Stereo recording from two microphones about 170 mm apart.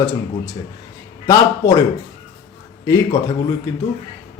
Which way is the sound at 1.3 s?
20° left (ahead or behind).